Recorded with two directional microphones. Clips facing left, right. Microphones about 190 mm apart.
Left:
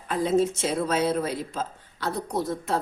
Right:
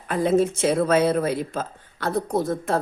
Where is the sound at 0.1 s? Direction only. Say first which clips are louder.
Right 3 dB; 55° right (ahead or behind).